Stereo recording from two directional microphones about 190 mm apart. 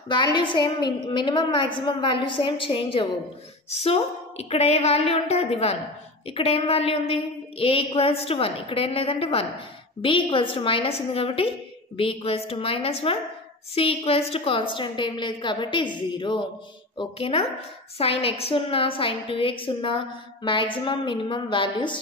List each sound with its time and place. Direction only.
0.1 s a woman's voice: 25° left (ahead or behind)